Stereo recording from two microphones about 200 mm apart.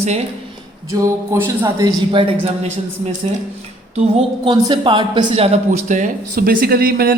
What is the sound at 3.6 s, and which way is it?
A man's voice, 30° right (ahead or behind).